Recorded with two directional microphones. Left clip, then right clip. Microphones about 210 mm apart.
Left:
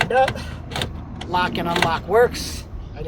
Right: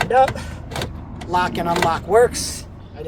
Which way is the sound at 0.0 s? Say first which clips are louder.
Right 2 dB; centre (ahead or behind).